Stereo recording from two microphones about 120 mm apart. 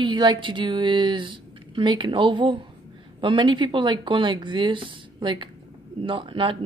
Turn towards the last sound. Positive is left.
turn(degrees=-45)  # may be behind; listen again after turning